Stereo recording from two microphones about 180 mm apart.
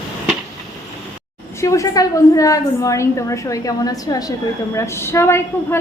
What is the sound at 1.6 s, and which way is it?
A woman's voice, 15° left (ahead or behind).